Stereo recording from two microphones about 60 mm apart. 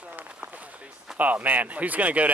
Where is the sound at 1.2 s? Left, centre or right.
Right.